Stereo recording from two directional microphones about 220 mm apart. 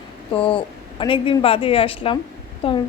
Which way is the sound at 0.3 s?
25° left (ahead or behind).